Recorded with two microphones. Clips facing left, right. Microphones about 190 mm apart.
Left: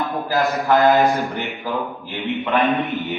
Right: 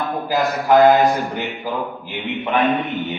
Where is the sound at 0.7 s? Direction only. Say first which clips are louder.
Right 3 dB; 20° right (ahead or behind).